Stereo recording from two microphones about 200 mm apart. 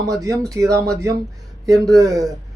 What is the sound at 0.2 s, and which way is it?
Speech, 15° right (ahead or behind).